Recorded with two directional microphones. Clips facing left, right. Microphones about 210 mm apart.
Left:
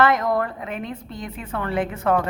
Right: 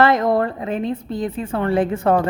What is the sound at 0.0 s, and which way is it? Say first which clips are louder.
A woman's voice: right 4 dB; 30° right (ahead or behind).